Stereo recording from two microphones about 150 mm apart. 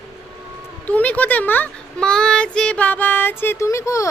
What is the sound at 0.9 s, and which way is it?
A child's voice, 10° left (ahead or behind).